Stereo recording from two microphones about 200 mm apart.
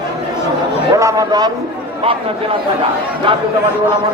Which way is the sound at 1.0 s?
15° right (ahead or behind).